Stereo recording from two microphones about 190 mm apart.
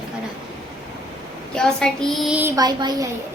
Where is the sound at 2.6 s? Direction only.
20° right (ahead or behind).